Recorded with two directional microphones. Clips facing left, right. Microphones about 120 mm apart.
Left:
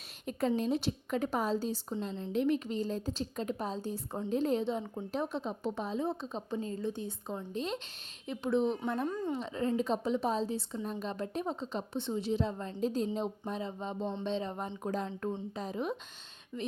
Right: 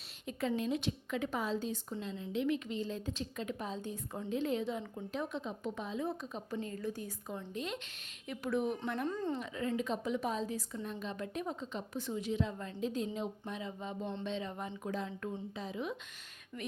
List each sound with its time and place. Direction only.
0.3 s a woman's voice: 40° left (ahead or behind); by 8.8 s 25° left (ahead or behind)
9.0 s a woman's voice: 10° left (ahead or behind)
9.4 s a woman's voice: 30° left (ahead or behind)
16.5 s a woman's voice: 15° left (ahead or behind)